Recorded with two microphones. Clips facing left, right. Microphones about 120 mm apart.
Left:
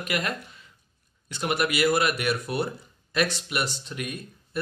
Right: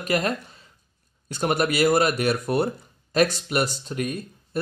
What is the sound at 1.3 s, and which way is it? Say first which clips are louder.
Speech: right 4 dB; 40° right (ahead or behind).